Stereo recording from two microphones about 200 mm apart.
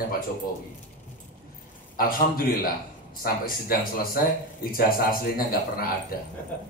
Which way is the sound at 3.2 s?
45° left (ahead or behind).